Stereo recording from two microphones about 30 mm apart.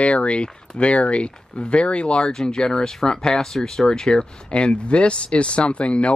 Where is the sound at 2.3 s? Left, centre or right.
Left.